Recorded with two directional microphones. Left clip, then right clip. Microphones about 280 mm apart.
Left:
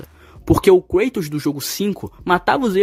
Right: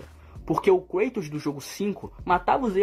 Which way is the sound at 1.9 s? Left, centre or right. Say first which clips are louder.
Left 5 dB; left.